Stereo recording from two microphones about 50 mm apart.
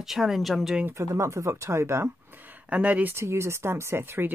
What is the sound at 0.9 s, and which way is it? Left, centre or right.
Speech, right.